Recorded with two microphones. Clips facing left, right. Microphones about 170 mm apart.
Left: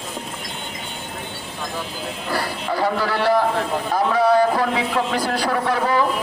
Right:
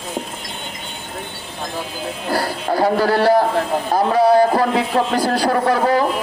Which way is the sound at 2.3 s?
40° right (ahead or behind).